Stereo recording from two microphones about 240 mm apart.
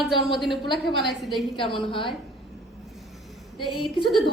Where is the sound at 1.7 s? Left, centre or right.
Left.